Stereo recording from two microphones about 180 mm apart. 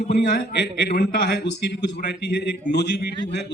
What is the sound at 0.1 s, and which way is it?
A man's voice, 65° left (ahead or behind).